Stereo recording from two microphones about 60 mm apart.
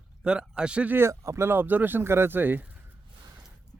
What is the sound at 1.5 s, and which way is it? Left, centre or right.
Speech, right.